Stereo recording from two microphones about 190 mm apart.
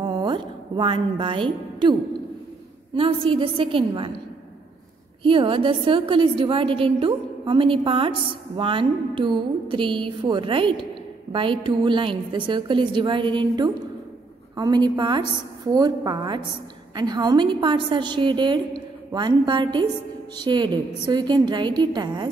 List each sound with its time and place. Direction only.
0.0 s music: 25° right (ahead or behind)
2.9 s a woman's voice: 30° right (ahead or behind)
5.2 s a woman's voice: 25° right (ahead or behind)
11.3 s a sound: 25° right (ahead or behind)
11.6 s a woman's voice: 25° right (ahead or behind)